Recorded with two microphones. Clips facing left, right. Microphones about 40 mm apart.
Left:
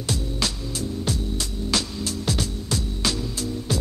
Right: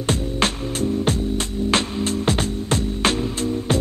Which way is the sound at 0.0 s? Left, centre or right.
Right.